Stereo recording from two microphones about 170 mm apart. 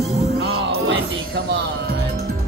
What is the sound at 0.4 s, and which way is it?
Music, 75° right (ahead or behind).